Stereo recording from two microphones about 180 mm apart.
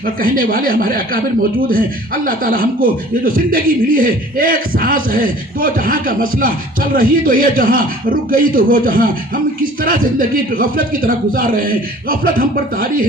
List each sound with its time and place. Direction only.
0.0 s speech: 50° right (ahead or behind)